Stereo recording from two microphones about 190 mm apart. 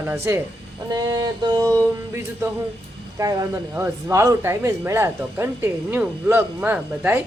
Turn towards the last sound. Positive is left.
turn(degrees=-10)  # may be behind; listen again after turning